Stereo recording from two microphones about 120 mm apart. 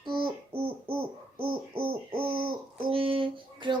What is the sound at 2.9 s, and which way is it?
Babbling, 50° right (ahead or behind).